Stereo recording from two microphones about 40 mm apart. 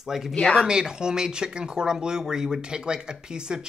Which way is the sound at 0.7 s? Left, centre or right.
Centre.